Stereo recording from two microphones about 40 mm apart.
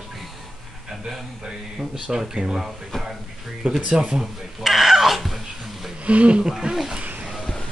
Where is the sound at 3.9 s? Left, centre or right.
Centre.